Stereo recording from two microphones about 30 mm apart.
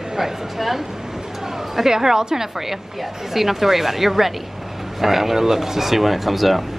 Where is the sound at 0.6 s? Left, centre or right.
Centre.